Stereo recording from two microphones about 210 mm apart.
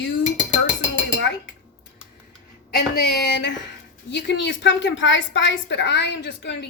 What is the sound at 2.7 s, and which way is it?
A woman's voice, 50° left (ahead or behind).